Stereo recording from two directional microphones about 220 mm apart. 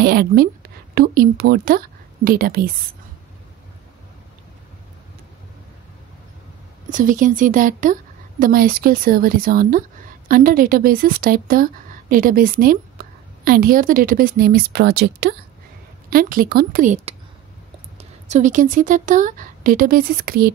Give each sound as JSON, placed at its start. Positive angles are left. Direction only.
{"t": 0.0, "sound": "speech", "side_deg": -45}
{"t": 6.9, "sound": "a woman's voice", "side_deg": -35}
{"t": 18.3, "sound": "a woman's voice", "side_deg": -35}